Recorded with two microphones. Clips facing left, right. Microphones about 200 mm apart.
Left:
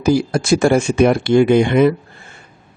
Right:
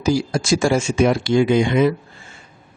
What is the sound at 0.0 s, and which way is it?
Speech, 60° left (ahead or behind).